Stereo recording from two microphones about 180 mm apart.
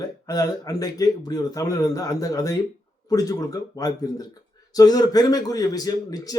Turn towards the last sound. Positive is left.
turn(degrees=20)  # may be behind; listen again after turning